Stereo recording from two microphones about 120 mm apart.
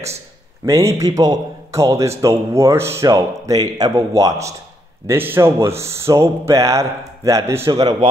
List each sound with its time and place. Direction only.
0.7 s speech: 25° right (ahead or behind)